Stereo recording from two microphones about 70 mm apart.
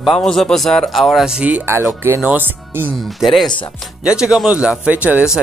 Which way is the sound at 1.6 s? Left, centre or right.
Right.